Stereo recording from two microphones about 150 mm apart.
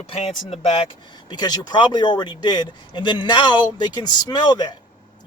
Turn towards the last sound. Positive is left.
turn(degrees=30)  # may be behind; listen again after turning